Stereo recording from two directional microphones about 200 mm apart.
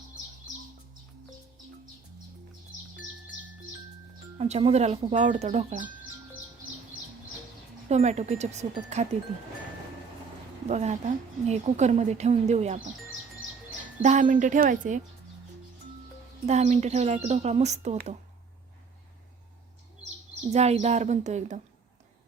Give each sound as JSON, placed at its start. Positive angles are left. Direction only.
{"t": 4.4, "sound": "a woman's voice", "side_deg": -35}
{"t": 7.9, "sound": "a woman's voice", "side_deg": -35}
{"t": 10.7, "sound": "a woman's voice", "side_deg": -35}
{"t": 14.0, "sound": "a woman's voice", "side_deg": -40}
{"t": 16.5, "sound": "a woman's voice", "side_deg": -35}
{"t": 20.5, "sound": "a woman's voice", "side_deg": -30}